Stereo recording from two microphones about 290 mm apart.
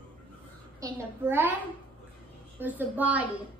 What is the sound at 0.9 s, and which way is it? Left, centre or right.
Speech, centre.